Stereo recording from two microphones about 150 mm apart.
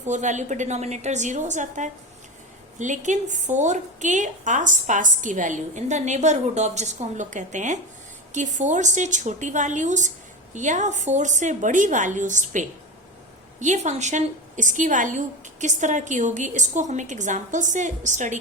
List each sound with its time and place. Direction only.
0.0 s a woman's voice: 50° right (ahead or behind)